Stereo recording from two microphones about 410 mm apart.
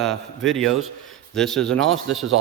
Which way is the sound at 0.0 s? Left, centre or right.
Centre.